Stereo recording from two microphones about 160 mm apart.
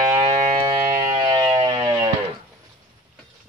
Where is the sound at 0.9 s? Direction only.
30° right (ahead or behind).